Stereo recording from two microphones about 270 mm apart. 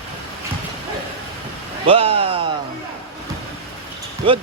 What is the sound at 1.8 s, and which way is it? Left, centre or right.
Speech, right.